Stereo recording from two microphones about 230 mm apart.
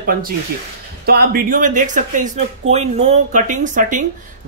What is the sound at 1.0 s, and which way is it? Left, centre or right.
Speech, right.